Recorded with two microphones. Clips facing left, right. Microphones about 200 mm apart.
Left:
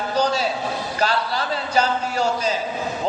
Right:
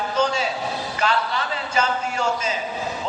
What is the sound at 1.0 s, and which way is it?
A man's voice, 35° left (ahead or behind).